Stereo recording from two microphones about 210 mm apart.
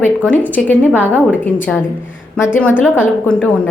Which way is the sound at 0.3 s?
5° left (ahead or behind).